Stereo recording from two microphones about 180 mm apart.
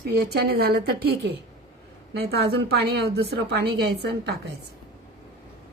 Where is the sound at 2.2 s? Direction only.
65° right (ahead or behind).